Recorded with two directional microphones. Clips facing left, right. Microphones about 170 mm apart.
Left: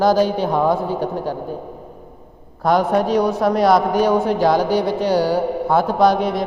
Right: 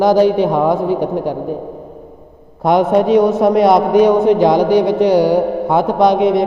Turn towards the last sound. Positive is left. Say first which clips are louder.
# right 4 dB
turn(degrees=-20)  # may be behind; listen again after turning